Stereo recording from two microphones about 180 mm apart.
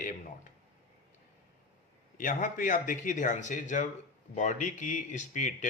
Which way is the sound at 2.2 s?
45° left (ahead or behind).